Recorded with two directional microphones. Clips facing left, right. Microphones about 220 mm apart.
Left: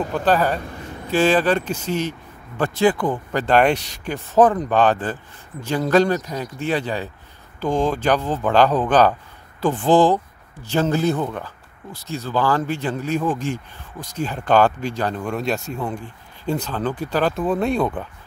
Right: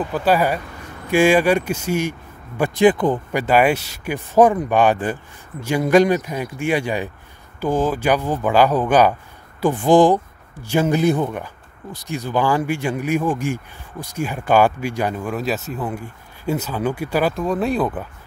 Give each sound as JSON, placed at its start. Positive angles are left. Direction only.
{"t": 0.1, "sound": "speech", "side_deg": -10}
{"t": 17.3, "sound": "speech", "side_deg": 0}